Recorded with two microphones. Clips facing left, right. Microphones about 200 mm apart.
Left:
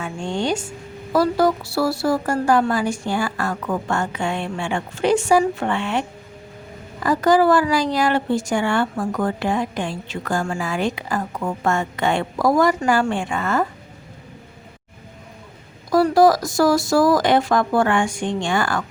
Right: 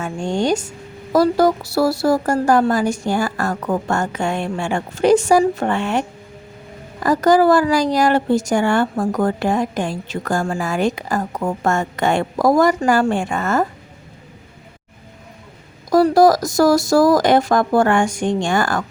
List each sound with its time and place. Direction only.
0.0 s speech: 45° right (ahead or behind)
15.9 s speech: 40° right (ahead or behind)